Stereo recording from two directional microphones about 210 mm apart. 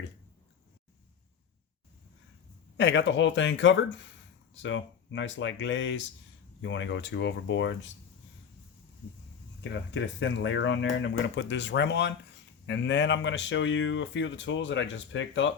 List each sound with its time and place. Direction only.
2.7 s speech: 60° left (ahead or behind)
9.6 s speech: 60° left (ahead or behind)